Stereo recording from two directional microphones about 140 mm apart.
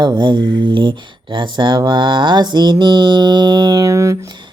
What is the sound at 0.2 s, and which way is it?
Mantra, 35° right (ahead or behind).